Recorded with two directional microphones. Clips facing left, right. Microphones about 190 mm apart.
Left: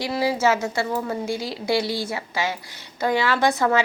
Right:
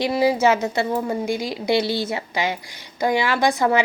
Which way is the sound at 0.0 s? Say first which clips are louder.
Right 4 dB; 20° right (ahead or behind).